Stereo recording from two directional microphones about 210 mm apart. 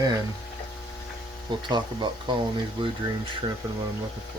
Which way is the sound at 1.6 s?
20° right (ahead or behind).